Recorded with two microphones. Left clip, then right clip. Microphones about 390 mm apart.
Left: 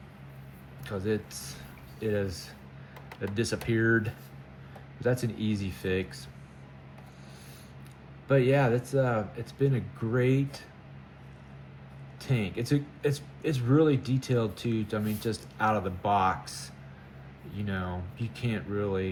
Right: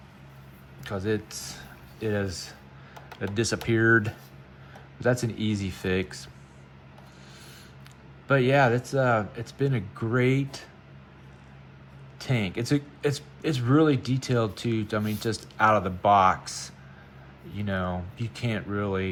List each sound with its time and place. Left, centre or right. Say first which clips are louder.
0.9 s speech: right 2 dB; centre
8.3 s speech: right 3 dB; centre
12.2 s speech: right 3 dB; centre